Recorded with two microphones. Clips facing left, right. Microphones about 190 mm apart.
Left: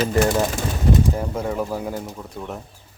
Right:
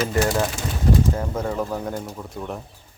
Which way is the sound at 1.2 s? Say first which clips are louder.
Left 1 dB; 10° left (ahead or behind).